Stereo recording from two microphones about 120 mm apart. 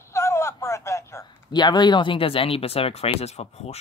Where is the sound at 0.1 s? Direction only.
25° left (ahead or behind).